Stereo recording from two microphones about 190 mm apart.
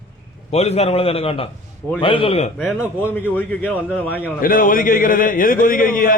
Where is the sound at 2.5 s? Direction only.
Centre (ahead or behind).